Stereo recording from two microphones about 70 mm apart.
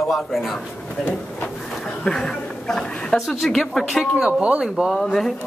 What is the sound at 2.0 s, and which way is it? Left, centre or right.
A woman's voice, centre.